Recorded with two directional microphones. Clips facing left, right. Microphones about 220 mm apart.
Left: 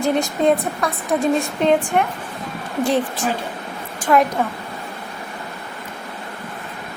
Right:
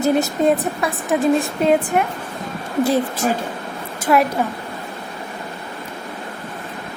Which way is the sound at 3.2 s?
45° right (ahead or behind).